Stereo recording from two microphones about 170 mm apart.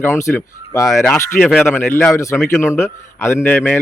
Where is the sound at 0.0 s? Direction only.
15° left (ahead or behind).